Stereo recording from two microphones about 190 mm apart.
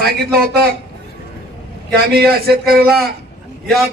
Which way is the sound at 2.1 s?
55° right (ahead or behind).